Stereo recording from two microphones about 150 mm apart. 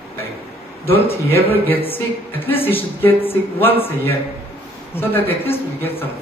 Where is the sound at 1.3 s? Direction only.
15° left (ahead or behind).